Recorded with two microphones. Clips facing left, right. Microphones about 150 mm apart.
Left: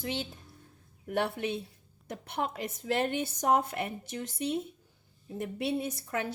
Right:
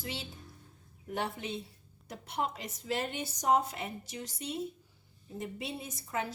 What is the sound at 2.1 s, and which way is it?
A woman's voice, 55° left (ahead or behind).